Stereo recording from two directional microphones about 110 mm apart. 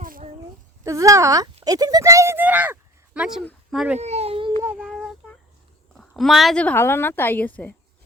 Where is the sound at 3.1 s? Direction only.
5° right (ahead or behind).